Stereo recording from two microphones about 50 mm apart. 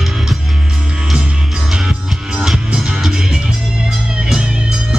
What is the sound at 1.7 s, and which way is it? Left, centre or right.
Music, centre.